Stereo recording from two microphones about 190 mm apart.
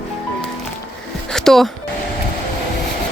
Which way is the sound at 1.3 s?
Centre (ahead or behind).